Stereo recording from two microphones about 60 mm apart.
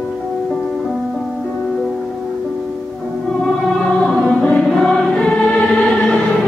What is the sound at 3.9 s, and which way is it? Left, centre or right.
Choir, centre.